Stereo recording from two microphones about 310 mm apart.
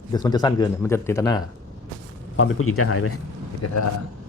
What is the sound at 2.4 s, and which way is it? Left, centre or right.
Speech, left.